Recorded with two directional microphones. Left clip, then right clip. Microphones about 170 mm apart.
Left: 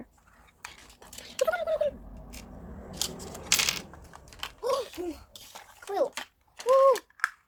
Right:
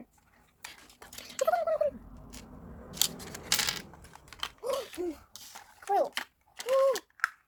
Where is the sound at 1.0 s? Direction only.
55° right (ahead or behind).